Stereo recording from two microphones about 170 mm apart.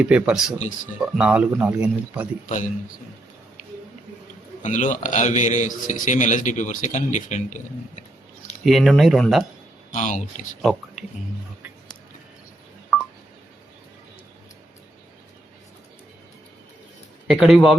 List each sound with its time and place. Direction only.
0.0 s speech: 5° right (ahead or behind)
4.6 s a man's voice: 45° left (ahead or behind)
8.6 s speech: centre (ahead or behind)
9.9 s a man's voice: 45° left (ahead or behind)
12.9 s telephone dialing: centre (ahead or behind)
17.2 s speech: centre (ahead or behind)